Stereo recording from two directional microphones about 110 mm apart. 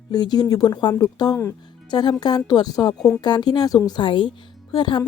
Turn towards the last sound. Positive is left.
turn(degrees=45)  # may be behind; listen again after turning